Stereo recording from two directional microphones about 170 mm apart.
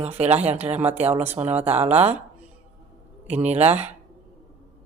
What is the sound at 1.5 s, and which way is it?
Speech, 40° right (ahead or behind).